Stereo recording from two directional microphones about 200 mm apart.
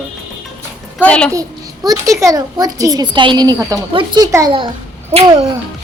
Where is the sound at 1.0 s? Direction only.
5° left (ahead or behind).